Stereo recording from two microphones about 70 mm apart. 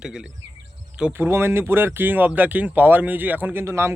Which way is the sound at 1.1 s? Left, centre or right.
Right.